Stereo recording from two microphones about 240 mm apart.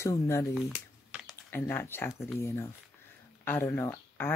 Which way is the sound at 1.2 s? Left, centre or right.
Centre.